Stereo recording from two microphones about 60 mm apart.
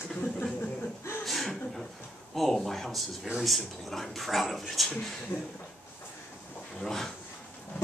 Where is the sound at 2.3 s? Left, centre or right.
Centre.